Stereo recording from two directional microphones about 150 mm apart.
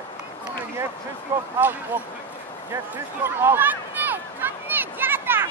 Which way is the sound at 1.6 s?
10° right (ahead or behind).